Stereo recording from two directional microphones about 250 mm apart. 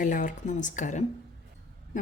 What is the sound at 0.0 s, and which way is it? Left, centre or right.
Speech, left.